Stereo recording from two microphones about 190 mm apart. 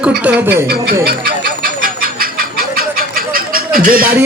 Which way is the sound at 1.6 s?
50° right (ahead or behind).